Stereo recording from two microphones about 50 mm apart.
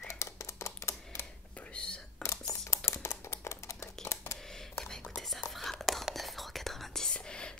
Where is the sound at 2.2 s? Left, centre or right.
Left.